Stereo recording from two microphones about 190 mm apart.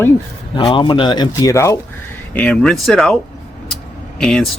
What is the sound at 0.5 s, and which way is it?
Speech, 25° left (ahead or behind).